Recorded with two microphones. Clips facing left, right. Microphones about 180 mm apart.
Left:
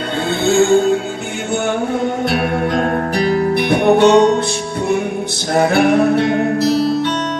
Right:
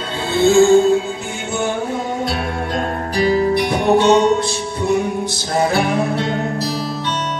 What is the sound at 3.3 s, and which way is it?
Music, 60° left (ahead or behind).